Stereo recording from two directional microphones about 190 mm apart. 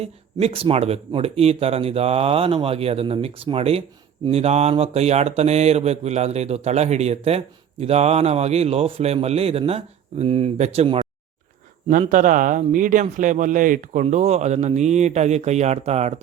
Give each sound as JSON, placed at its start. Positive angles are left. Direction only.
{"t": 0.0, "sound": "speech", "side_deg": -30}
{"t": 11.9, "sound": "speech", "side_deg": -45}